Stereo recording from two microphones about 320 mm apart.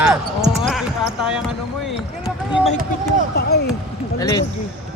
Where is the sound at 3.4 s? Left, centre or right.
Left.